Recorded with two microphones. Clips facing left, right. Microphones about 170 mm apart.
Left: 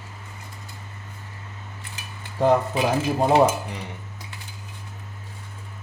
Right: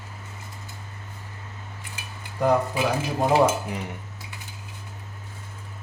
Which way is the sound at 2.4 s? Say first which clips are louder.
Left 3 dB; 25° left (ahead or behind).